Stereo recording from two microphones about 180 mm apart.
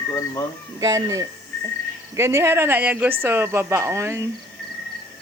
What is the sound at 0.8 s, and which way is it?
Speech, 20° right (ahead or behind).